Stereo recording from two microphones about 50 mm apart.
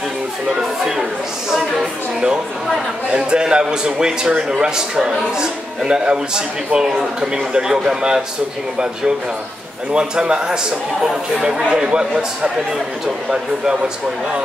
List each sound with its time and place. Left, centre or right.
0.5 s a man's voice: centre
3.1 s a man's voice: centre
9.9 s a man's voice: centre